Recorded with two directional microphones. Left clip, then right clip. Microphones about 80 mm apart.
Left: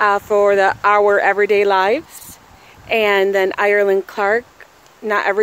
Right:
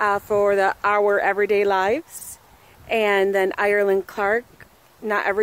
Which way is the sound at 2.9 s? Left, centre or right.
Right.